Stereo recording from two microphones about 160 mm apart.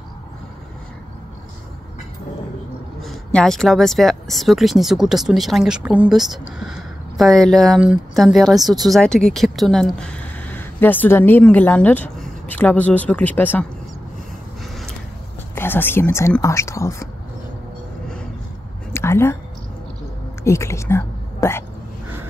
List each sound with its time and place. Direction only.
3.0 s a woman's voice: 5° left (ahead or behind)
15.5 s a woman's voice: 15° left (ahead or behind)
18.9 s a sound: 15° left (ahead or behind)
20.4 s speech: 15° left (ahead or behind)